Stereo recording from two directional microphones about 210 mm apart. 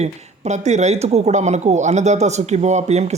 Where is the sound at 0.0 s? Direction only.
35° right (ahead or behind).